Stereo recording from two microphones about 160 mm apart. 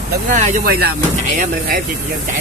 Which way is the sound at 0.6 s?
80° right.